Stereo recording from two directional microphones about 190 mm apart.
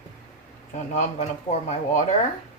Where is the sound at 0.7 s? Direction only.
40° left (ahead or behind).